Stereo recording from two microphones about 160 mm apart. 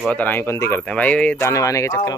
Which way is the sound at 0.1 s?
10° left (ahead or behind).